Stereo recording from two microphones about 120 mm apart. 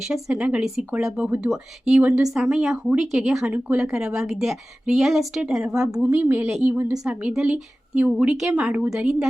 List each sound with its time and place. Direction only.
0.0 s a woman's voice: 5° right (ahead or behind)
6.0 s speech: 15° right (ahead or behind)
6.5 s a woman's voice: 5° right (ahead or behind)